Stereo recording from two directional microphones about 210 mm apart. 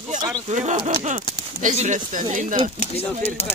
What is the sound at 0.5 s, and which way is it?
Speech, 35° right (ahead or behind).